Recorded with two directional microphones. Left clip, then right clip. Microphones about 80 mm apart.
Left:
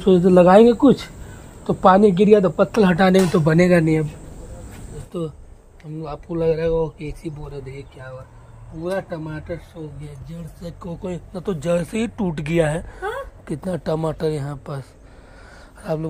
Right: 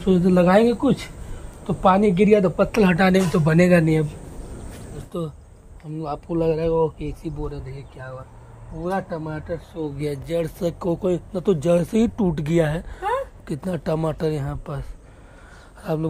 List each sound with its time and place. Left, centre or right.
0.0 s a woman's voice: left; by 4.0 s centre
5.1 s speech: centre
5.9 s speech: centre
8.8 s speech: right
10.7 s speech: right
11.0 s speech: right
11.3 s speech: right
12.5 s speech: centre